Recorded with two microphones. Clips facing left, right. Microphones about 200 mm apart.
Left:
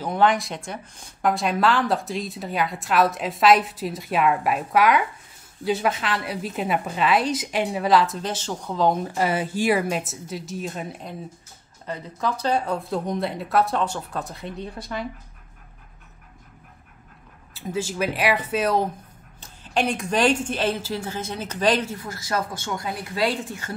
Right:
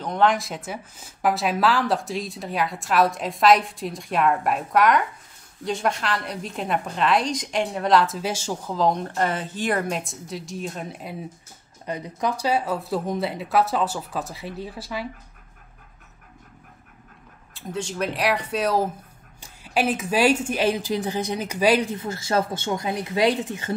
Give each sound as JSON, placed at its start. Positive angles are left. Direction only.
{"t": 0.0, "sound": "a woman's voice", "side_deg": 5}
{"t": 11.8, "sound": "a woman's voice", "side_deg": -15}
{"t": 17.6, "sound": "a woman's voice", "side_deg": 5}
{"t": 21.9, "sound": "speech", "side_deg": -25}